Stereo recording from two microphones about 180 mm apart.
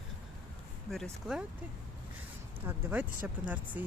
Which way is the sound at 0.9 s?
Centre (ahead or behind).